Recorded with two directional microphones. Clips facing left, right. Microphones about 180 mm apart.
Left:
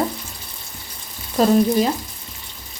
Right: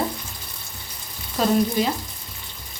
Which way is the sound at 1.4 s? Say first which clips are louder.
Left 5 dB; 40° left (ahead or behind).